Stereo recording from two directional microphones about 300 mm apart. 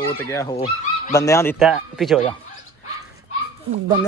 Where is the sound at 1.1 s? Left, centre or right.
Centre.